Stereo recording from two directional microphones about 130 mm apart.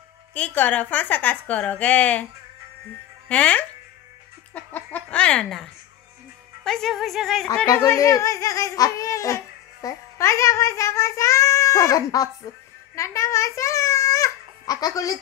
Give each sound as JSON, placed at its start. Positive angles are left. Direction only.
{"t": 0.3, "sound": "a woman's voice", "side_deg": 10}
{"t": 3.3, "sound": "a woman's voice", "side_deg": 10}
{"t": 7.8, "sound": "a child's voice", "side_deg": 20}